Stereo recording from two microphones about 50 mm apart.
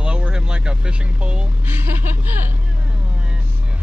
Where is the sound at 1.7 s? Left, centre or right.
Right.